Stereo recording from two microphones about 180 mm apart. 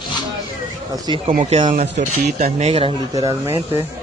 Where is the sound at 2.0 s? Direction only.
40° right (ahead or behind).